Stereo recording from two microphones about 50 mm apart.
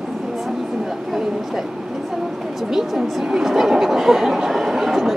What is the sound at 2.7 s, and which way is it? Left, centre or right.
Speech, centre.